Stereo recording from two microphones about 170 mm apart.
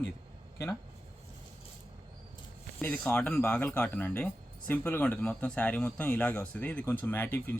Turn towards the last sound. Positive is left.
turn(degrees=10)  # may be behind; listen again after turning